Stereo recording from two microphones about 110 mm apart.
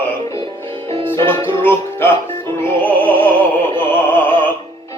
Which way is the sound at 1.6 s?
20° left (ahead or behind).